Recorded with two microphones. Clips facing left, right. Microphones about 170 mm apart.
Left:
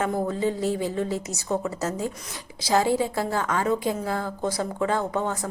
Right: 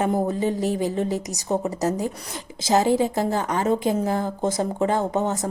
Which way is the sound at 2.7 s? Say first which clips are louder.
Right 3 dB; 20° right (ahead or behind).